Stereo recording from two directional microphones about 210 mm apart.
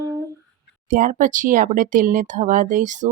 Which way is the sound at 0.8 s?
40° right (ahead or behind).